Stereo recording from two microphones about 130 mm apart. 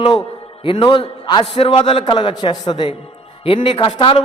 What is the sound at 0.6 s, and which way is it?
A man's voice, 40° left (ahead or behind).